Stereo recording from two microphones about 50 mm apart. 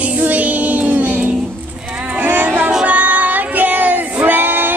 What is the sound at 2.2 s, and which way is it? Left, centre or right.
Music, right.